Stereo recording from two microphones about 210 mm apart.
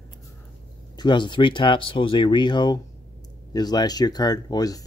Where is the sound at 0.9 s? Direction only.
20° left (ahead or behind).